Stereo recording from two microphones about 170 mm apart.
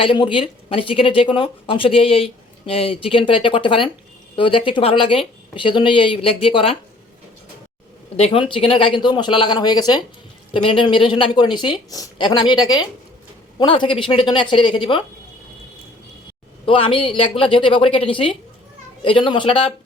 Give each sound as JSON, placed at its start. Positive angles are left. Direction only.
{"t": 0.0, "sound": "speech", "side_deg": 30}
{"t": 8.1, "sound": "speech", "side_deg": 35}
{"t": 16.6, "sound": "speech", "side_deg": 30}